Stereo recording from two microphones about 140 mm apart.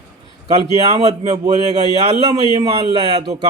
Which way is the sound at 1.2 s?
30° right (ahead or behind).